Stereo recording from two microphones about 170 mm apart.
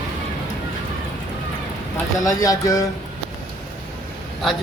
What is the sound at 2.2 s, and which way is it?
Speech, 20° left (ahead or behind).